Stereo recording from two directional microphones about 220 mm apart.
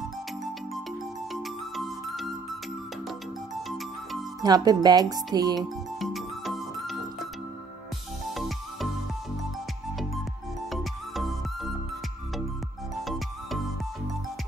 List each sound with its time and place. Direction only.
1.3 s music: centre (ahead or behind)
3.5 s music: centre (ahead or behind)
4.4 s speech: 15° right (ahead or behind)
5.9 s music: centre (ahead or behind)
10.7 s music: centre (ahead or behind)